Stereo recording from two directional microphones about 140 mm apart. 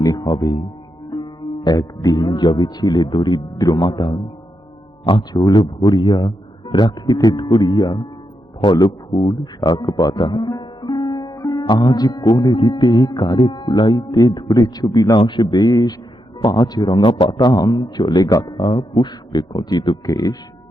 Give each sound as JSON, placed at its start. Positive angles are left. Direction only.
{"t": 0.0, "sound": "music", "side_deg": 30}
{"t": 1.1, "sound": "a man's voice", "side_deg": 30}